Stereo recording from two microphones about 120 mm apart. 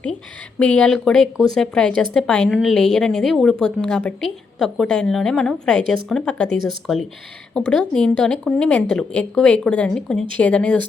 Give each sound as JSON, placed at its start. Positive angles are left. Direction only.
{"t": 0.6, "sound": "a woman's voice", "side_deg": 10}